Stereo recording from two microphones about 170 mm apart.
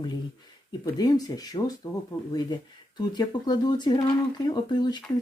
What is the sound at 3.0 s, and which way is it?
Speech, 25° left (ahead or behind).